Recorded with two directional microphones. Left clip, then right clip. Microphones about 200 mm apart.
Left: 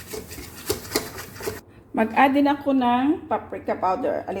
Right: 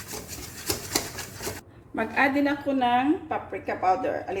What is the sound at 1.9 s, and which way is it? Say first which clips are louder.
A woman's voice: left 5 dB; 40° left (ahead or behind).